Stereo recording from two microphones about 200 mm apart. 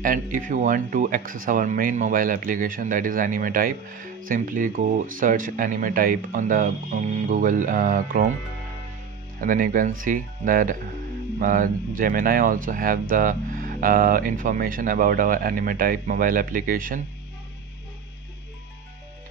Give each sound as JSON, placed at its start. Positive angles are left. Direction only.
{"t": 0.0, "sound": "speech", "side_deg": -40}
{"t": 9.4, "sound": "speech", "side_deg": -45}